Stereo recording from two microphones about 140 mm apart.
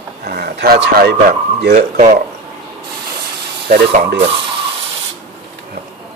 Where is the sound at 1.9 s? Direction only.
60° right (ahead or behind).